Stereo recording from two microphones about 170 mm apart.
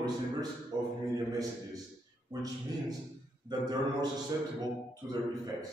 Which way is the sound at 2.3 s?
20° right (ahead or behind).